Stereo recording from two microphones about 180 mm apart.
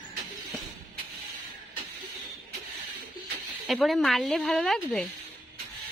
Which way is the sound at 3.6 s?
Centre (ahead or behind).